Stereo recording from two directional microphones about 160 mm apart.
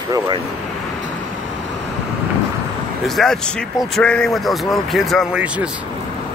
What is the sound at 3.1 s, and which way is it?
Speech, centre (ahead or behind).